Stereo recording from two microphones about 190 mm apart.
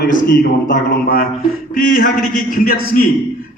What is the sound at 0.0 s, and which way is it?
A man's voice, 45° left (ahead or behind).